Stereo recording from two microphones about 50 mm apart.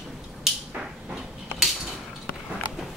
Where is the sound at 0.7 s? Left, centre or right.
Right.